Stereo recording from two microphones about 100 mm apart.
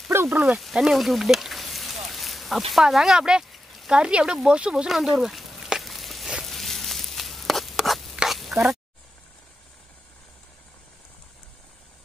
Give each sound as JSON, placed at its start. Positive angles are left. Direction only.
{"t": 0.1, "sound": "speech", "side_deg": -25}
{"t": 0.5, "sound": "speech", "side_deg": 0}
{"t": 2.0, "sound": "a sound", "side_deg": 0}